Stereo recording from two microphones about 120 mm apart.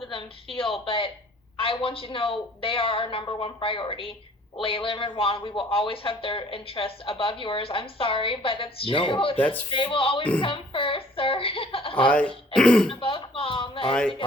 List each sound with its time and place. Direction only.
0.1 s speech: 45° left (ahead or behind)
9.4 s speech: 15° left (ahead or behind)
9.7 s speech: 45° left (ahead or behind)
12.0 s speech: 10° left (ahead or behind)
12.9 s speech: 45° left (ahead or behind)